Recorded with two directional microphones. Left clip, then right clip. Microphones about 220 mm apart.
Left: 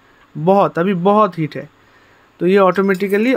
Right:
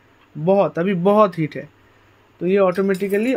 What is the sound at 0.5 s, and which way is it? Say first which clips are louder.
Speech: left 4 dB; 25° left (ahead or behind).